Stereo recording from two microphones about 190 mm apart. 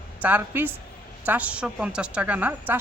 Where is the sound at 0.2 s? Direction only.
10° right (ahead or behind).